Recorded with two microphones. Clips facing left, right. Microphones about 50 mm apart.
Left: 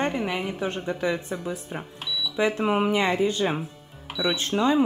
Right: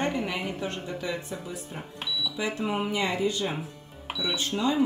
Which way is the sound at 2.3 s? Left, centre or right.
Left.